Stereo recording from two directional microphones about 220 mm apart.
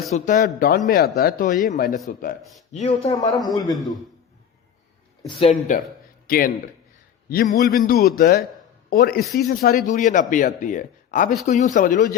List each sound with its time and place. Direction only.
0.3 s speech: 35° left (ahead or behind)
3.1 s a man's voice: 15° left (ahead or behind)
5.4 s a man's voice: 30° left (ahead or behind)